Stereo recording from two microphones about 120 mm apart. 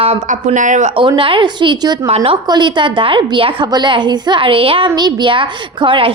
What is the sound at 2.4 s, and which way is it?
A woman's voice, 40° right (ahead or behind).